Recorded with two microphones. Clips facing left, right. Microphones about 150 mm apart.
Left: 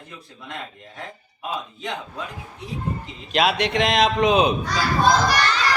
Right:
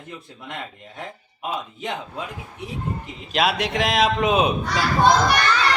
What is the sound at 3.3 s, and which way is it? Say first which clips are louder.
Speech: left 1 dB; centre (ahead or behind).